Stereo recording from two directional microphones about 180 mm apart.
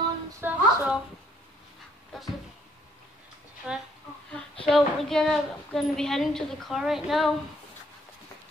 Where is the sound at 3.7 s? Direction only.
5° right (ahead or behind).